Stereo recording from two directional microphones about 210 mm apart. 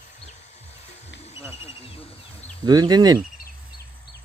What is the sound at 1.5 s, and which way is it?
Speech, 30° left (ahead or behind).